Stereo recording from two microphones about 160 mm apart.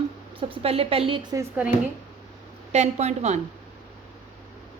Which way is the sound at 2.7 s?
45° right (ahead or behind).